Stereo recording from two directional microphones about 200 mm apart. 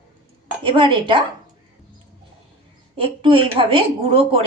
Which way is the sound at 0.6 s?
25° right (ahead or behind).